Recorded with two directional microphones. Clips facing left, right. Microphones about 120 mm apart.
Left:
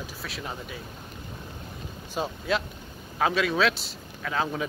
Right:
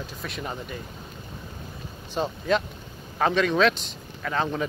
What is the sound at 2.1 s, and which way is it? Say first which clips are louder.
Speech: right 3 dB; 10° left (ahead or behind).